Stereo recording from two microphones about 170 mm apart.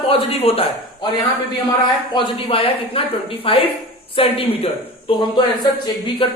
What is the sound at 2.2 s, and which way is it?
Speech, 35° left (ahead or behind).